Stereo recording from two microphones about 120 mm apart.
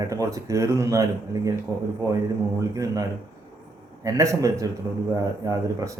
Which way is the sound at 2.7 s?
30° right (ahead or behind).